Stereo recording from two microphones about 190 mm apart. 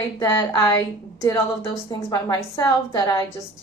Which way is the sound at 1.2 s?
15° left (ahead or behind).